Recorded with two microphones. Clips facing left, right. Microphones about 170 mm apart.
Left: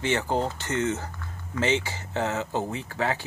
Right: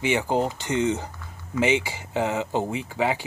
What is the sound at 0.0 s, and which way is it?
Speech, 10° right (ahead or behind).